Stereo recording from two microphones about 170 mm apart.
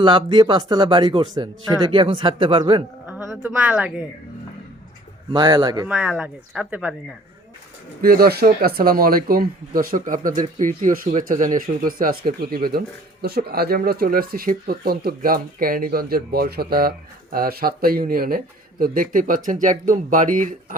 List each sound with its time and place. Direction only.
0.0 s speech: 30° right (ahead or behind)
3.1 s speech: 15° right (ahead or behind)
5.3 s speech: 25° right (ahead or behind)
5.9 s speech: 10° right (ahead or behind)
8.0 s speech: 60° right (ahead or behind)